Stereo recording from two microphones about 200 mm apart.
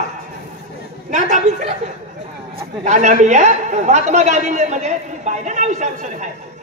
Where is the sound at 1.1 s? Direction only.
35° right (ahead or behind).